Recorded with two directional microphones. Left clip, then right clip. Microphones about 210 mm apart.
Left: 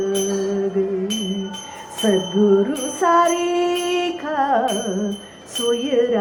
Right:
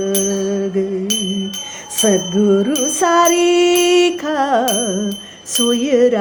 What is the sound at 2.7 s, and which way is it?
Music, 50° right (ahead or behind).